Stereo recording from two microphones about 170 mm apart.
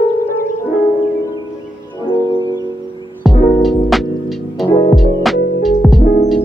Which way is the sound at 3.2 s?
Centre (ahead or behind).